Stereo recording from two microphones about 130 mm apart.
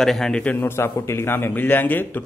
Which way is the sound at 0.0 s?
5° left (ahead or behind).